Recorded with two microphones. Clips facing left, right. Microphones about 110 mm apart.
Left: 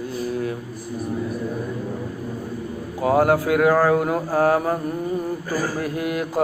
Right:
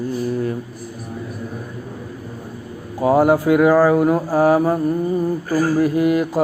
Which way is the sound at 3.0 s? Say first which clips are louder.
Right 3 dB; 5° right (ahead or behind).